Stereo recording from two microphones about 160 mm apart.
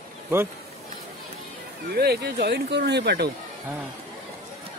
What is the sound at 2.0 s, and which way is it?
Speech, 80° right.